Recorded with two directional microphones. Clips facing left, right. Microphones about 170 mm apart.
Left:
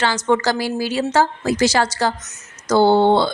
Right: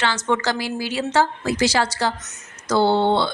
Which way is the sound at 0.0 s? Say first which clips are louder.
Left 4 dB; 40° left (ahead or behind).